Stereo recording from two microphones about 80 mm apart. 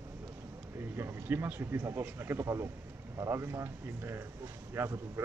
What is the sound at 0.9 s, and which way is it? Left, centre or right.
A man's voice, right.